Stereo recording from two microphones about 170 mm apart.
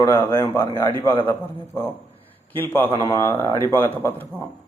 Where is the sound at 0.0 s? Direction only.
15° left (ahead or behind).